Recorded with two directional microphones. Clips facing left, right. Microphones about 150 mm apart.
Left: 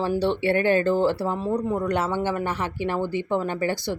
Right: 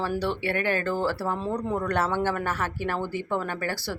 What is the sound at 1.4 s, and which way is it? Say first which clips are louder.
Speech: left 3 dB; 10° left (ahead or behind).